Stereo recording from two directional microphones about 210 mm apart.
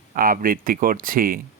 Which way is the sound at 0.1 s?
40° right (ahead or behind).